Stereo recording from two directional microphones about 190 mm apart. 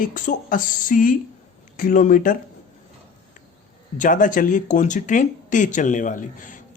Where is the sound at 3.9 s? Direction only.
45° left (ahead or behind).